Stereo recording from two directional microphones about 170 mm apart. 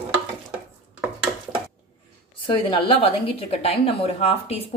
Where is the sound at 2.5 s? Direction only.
30° left (ahead or behind).